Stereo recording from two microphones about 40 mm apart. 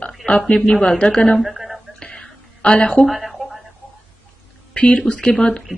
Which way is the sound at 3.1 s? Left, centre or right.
Centre.